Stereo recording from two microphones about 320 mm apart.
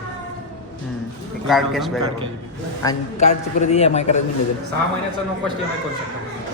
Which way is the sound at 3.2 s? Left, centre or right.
Left.